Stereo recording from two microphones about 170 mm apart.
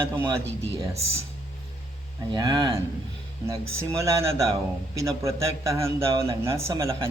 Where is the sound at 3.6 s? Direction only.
15° right (ahead or behind).